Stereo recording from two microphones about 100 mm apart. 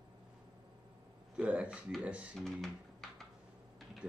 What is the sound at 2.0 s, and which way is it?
Speech, 10° right (ahead or behind).